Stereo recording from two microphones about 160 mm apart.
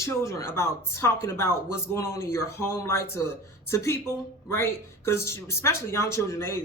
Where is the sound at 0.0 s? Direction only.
20° left (ahead or behind).